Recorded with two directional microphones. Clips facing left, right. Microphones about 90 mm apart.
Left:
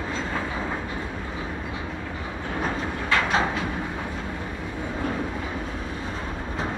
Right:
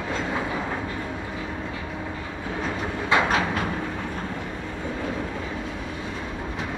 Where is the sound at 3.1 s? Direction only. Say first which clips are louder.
Right 3 dB; 20° right (ahead or behind).